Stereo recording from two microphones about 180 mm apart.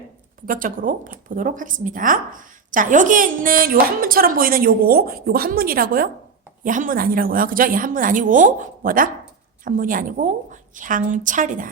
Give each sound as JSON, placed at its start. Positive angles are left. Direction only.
{"t": 0.4, "sound": "speech", "side_deg": -50}